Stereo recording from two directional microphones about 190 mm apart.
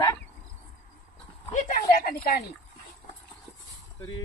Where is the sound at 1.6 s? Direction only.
50° left (ahead or behind).